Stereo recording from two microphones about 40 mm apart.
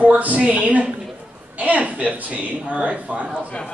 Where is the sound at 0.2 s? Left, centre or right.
Right.